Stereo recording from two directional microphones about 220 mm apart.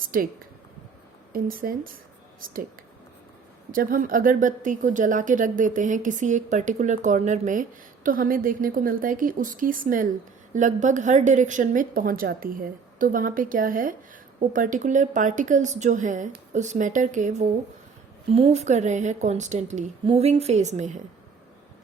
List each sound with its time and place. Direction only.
0.1 s a woman's voice: 40° right (ahead or behind)
1.3 s a woman's voice: 40° right (ahead or behind)
3.7 s a woman's voice: 40° right (ahead or behind)